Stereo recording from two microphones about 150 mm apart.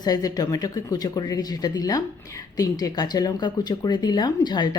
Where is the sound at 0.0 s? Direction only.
25° left (ahead or behind).